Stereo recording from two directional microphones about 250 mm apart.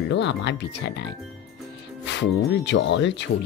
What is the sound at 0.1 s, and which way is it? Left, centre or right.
Speech, left.